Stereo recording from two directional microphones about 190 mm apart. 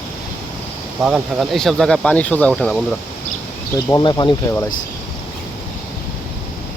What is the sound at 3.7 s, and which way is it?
Speech, 20° left (ahead or behind).